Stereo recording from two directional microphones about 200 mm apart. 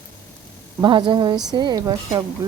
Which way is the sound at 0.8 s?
25° right (ahead or behind).